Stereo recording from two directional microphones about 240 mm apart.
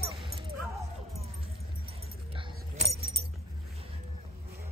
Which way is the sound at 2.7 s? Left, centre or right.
Right.